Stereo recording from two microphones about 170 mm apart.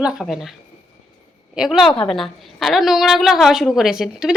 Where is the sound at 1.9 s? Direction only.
30° left (ahead or behind).